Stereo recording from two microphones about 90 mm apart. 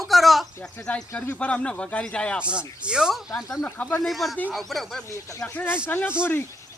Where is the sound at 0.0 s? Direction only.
Centre (ahead or behind).